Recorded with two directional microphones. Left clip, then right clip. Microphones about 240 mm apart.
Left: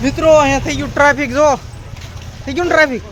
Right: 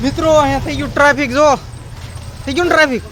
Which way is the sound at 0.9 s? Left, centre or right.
Centre.